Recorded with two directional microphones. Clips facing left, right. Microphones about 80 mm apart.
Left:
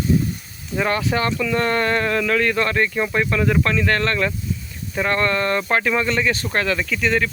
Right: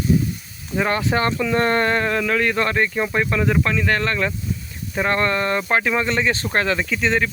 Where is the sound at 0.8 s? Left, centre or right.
Right.